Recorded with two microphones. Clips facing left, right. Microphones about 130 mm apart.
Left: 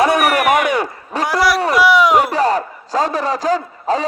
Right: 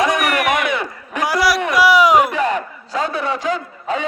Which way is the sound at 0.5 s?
45° left (ahead or behind).